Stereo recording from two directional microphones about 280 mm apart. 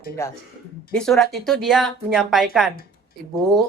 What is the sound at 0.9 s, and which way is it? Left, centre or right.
Speech, centre.